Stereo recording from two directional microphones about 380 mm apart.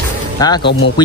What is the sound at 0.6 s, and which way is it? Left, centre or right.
Speech, left.